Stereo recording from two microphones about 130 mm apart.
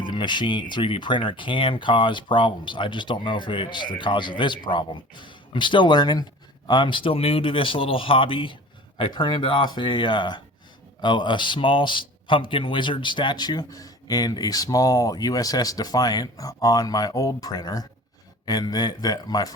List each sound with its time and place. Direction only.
0.0 s speech: 35° left (ahead or behind)